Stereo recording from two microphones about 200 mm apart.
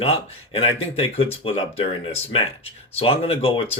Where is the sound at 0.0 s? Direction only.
30° left (ahead or behind).